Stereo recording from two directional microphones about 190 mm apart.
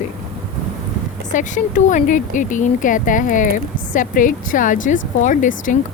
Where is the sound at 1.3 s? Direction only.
40° left (ahead or behind).